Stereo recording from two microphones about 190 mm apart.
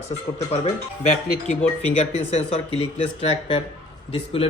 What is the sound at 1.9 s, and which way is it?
Speech, 35° left (ahead or behind).